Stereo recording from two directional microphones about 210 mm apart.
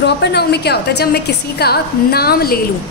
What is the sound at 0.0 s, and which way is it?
A woman's voice, 55° left (ahead or behind).